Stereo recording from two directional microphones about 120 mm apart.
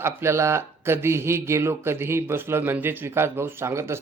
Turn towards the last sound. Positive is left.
turn(degrees=-25)  # may be behind; listen again after turning